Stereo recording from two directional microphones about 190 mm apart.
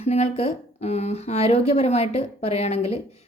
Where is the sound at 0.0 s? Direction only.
35° left (ahead or behind).